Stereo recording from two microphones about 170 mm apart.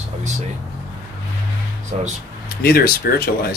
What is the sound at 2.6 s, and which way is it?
Speech, 65° left (ahead or behind).